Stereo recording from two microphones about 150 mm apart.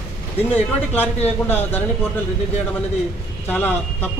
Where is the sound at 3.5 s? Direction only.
15° left (ahead or behind).